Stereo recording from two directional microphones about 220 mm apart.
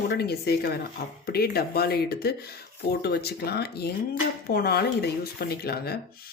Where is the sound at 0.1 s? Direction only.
45° left (ahead or behind).